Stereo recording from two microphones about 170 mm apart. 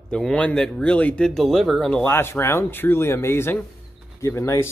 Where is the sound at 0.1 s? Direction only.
5° left (ahead or behind).